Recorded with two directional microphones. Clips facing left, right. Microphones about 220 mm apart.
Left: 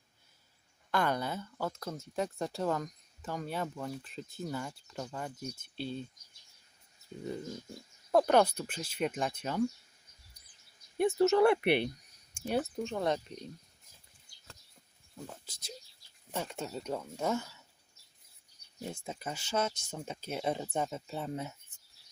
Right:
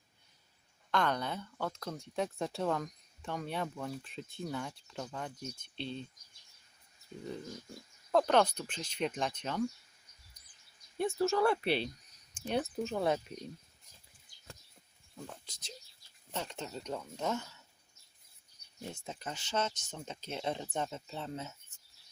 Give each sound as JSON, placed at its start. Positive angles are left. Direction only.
{"t": 0.9, "sound": "speech", "side_deg": 5}
{"t": 8.1, "sound": "speech", "side_deg": 10}
{"t": 11.2, "sound": "speech", "side_deg": 20}
{"t": 12.3, "sound": "speech", "side_deg": 5}
{"t": 15.1, "sound": "speech", "side_deg": 5}
{"t": 18.8, "sound": "speech", "side_deg": 10}